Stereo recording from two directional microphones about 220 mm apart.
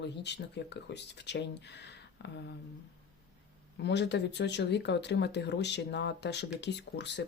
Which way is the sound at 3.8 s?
50° left (ahead or behind).